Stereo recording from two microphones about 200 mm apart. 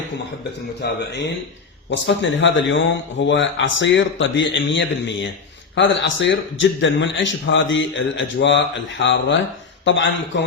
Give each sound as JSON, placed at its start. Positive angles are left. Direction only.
{"t": 0.8, "sound": "a man's voice", "side_deg": 60}